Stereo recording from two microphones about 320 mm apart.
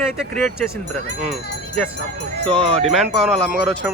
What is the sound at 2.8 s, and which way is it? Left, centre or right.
Speech, centre.